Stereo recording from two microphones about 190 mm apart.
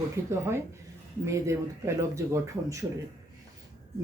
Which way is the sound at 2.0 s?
15° right (ahead or behind).